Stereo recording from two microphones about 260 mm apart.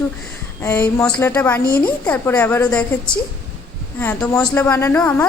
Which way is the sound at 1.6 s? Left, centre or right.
Left.